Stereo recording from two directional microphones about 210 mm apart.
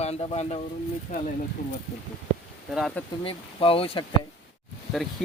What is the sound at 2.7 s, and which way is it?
Speech, centre (ahead or behind).